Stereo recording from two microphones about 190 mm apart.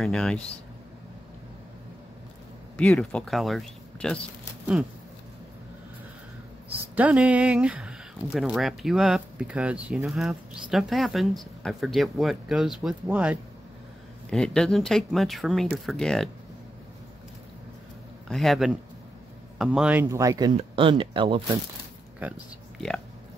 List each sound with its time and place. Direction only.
0.0 s speech: 5° left (ahead or behind)
2.8 s speech: 5° left (ahead or behind)
7.0 s speech: 5° right (ahead or behind)
18.3 s speech: centre (ahead or behind); by 21.4 s 25° right (ahead or behind)
22.2 s speech: 10° right (ahead or behind)